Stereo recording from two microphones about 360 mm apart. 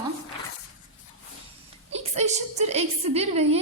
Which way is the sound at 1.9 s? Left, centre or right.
Centre.